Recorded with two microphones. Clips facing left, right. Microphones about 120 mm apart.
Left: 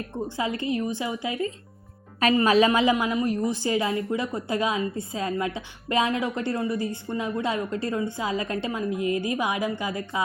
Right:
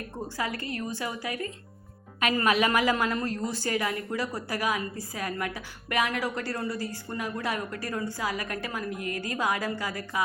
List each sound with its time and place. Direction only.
0.3 s a woman's voice: 20° left (ahead or behind)
2.9 s a woman's voice: 15° left (ahead or behind)